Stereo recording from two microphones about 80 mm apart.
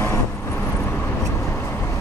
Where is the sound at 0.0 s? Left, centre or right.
Left.